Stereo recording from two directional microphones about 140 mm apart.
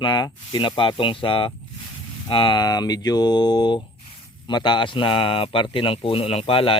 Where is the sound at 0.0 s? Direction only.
30° left (ahead or behind).